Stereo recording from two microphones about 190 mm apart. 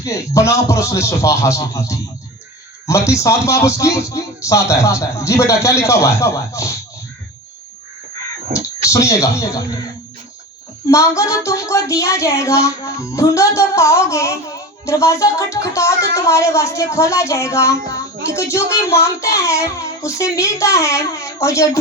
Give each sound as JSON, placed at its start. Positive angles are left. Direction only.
{"t": 0.0, "sound": "speech", "side_deg": 15}
{"t": 8.5, "sound": "speech", "side_deg": 15}
{"t": 10.8, "sound": "speech", "side_deg": 15}